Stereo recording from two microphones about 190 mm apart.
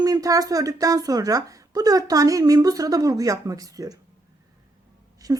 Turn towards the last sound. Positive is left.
turn(degrees=-20)  # may be behind; listen again after turning